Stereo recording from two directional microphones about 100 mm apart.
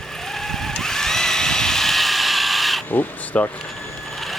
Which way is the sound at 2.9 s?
20° left (ahead or behind).